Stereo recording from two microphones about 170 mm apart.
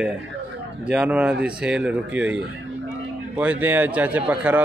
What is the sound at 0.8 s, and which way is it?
Speech, 5° right (ahead or behind).